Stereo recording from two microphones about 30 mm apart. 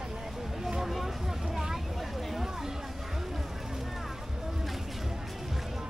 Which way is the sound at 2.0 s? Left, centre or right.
Centre.